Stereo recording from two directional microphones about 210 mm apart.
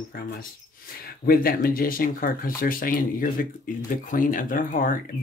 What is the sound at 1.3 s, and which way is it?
Speech, 45° left (ahead or behind).